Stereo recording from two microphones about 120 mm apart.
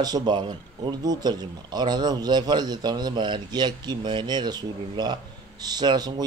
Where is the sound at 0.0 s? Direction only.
35° right (ahead or behind).